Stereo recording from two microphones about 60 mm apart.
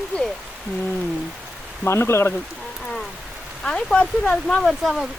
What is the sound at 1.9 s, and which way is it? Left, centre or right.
Speech, left.